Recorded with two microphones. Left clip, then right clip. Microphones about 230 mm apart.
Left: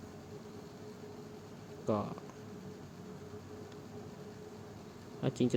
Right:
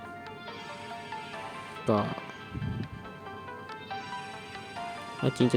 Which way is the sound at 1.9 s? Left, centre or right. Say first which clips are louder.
Right 8 dB; right.